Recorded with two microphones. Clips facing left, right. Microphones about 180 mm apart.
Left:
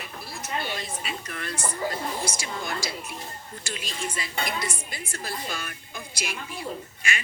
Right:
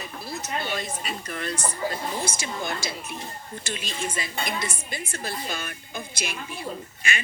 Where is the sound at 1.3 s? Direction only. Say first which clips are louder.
Right 4 dB; 30° right (ahead or behind).